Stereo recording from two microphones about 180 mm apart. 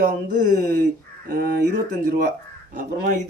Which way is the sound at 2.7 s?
45° right (ahead or behind).